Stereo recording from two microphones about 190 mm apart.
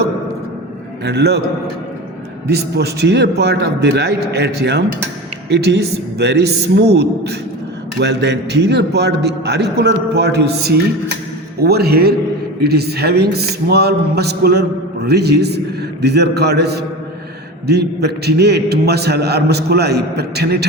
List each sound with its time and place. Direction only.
1.0 s a man's voice: 60° right (ahead or behind)
2.5 s a man's voice: 60° right (ahead or behind)